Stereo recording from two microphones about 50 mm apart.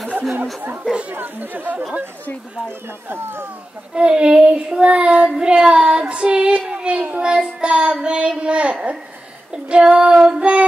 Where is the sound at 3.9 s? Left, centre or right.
Centre.